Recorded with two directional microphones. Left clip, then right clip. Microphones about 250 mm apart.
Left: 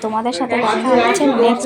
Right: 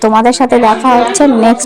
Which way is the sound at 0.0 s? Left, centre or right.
Right.